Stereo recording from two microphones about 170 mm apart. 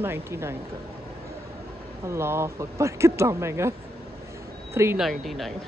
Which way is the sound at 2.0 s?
15° right (ahead or behind).